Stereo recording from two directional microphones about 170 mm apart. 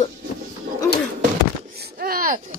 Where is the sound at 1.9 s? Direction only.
60° right (ahead or behind).